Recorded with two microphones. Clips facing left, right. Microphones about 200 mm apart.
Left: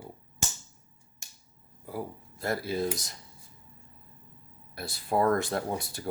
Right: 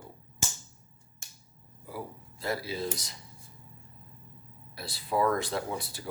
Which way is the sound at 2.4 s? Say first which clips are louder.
Left 3 dB; 50° left (ahead or behind).